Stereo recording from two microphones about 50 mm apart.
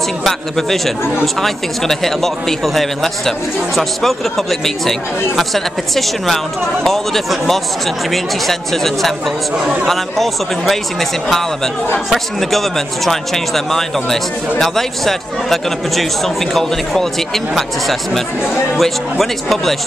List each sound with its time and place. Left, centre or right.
0.3 s a man's voice: centre